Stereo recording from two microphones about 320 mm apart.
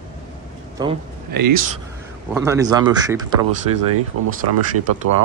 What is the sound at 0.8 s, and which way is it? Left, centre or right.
Speech, centre.